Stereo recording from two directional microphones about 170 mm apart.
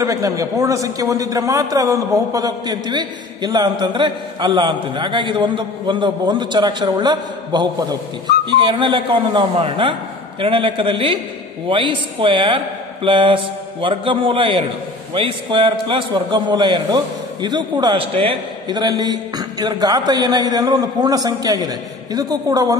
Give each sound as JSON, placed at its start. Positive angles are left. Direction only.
{"t": 0.0, "sound": "a man's voice", "side_deg": -20}